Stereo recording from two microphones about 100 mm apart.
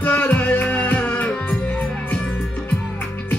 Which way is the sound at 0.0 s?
15° left (ahead or behind).